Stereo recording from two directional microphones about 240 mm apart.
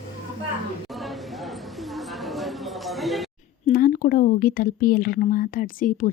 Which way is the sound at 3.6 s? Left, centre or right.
Left.